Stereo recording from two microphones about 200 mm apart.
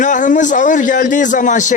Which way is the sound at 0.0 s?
40° left (ahead or behind).